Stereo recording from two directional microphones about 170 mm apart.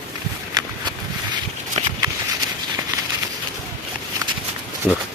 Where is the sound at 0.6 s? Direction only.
20° right (ahead or behind).